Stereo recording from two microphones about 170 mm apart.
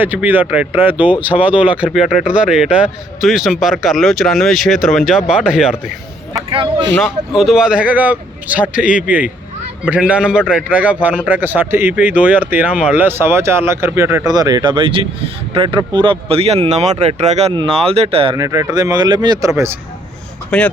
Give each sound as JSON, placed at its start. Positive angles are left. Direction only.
{"t": 0.0, "sound": "speech", "side_deg": -10}
{"t": 6.5, "sound": "speech", "side_deg": -30}
{"t": 7.0, "sound": "speech", "side_deg": 0}
{"t": 18.3, "sound": "speech", "side_deg": -15}
{"t": 20.5, "sound": "speech", "side_deg": 5}